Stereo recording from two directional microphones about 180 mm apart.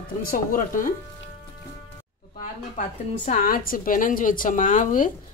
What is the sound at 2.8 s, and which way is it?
Speech, 45° left (ahead or behind).